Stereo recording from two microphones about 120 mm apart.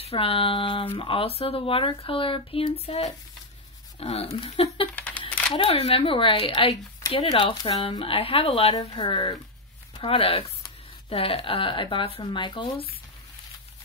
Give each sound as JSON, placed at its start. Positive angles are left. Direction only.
{"t": 0.0, "sound": "speech", "side_deg": 55}
{"t": 4.9, "sound": "camera", "side_deg": 10}
{"t": 5.6, "sound": "speech", "side_deg": 50}